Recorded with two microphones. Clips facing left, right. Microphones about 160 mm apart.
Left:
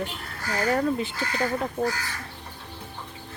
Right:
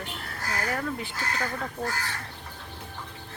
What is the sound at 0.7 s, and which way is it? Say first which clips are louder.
Speech: left 10 dB; 25° left (ahead or behind).